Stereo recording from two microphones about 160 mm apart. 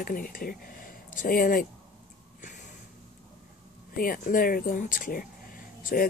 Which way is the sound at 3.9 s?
60° left (ahead or behind).